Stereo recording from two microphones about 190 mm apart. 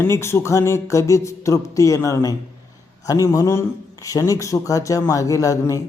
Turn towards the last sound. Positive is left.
turn(degrees=15)  # may be behind; listen again after turning